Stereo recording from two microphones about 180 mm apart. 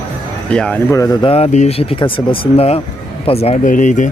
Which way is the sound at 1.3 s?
40° left (ahead or behind).